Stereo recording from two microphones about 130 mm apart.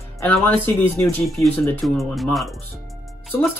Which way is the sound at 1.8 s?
Centre (ahead or behind).